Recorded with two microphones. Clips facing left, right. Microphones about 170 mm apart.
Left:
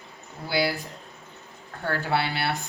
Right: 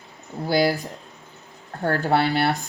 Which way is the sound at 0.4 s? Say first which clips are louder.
Right 6 dB; 40° right (ahead or behind).